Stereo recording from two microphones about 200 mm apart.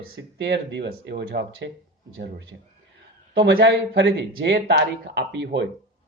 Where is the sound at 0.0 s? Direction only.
65° right (ahead or behind).